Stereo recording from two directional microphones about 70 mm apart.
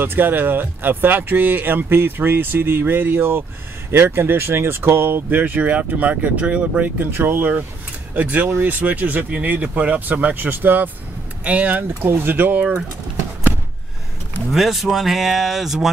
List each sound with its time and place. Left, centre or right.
0.0 s speech: right
7.1 s speech: right
12.1 s speech: right
14.5 s speech: centre